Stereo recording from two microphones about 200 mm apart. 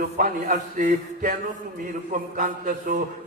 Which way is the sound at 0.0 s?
45° right (ahead or behind).